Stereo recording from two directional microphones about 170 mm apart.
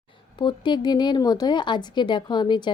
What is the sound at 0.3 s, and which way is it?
Speech, 25° left (ahead or behind).